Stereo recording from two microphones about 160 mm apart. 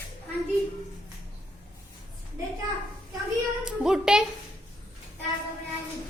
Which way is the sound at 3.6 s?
5° right (ahead or behind).